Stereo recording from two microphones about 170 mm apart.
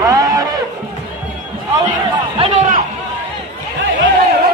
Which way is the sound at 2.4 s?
40° right (ahead or behind).